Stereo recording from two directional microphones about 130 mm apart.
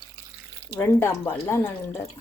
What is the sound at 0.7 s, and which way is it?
Speech, 15° left (ahead or behind).